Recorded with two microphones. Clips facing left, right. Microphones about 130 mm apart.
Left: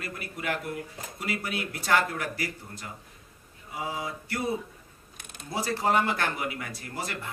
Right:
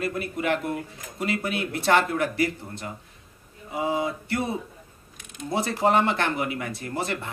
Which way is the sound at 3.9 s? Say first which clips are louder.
Right 9 dB; 25° right (ahead or behind).